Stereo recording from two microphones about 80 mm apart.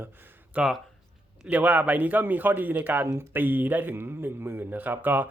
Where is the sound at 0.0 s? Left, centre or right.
Right.